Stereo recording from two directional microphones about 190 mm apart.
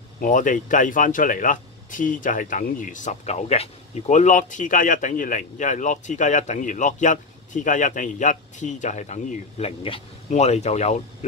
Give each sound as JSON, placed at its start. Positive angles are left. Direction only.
{"t": 0.2, "sound": "speech", "side_deg": 45}